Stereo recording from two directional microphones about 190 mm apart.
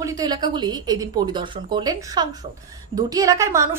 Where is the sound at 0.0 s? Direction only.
20° right (ahead or behind).